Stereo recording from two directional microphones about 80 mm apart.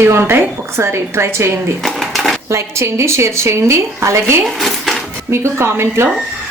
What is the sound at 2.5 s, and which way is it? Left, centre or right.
A woman's voice, right.